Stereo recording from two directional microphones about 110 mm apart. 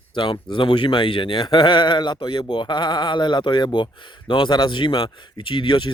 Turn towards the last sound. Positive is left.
turn(degrees=50)  # may be behind; listen again after turning